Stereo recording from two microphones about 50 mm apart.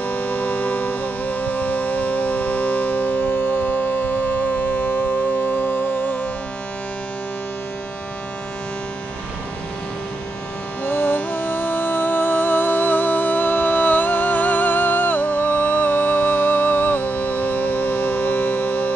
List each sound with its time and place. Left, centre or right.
0.0 s music: left
10.9 s music: left